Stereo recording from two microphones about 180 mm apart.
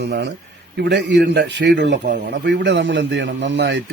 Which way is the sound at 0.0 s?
75° right (ahead or behind).